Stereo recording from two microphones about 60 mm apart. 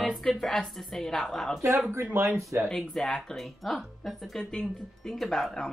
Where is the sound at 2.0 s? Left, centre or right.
Right.